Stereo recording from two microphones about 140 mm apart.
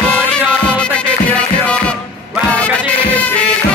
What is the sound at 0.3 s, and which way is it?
Music, 10° left (ahead or behind).